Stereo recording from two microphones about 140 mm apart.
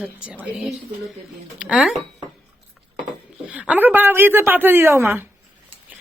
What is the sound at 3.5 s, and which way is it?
A woman's voice, 10° right (ahead or behind).